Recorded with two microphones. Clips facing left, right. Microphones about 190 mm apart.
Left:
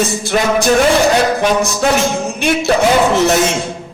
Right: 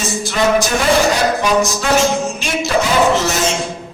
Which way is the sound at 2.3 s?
60° left (ahead or behind).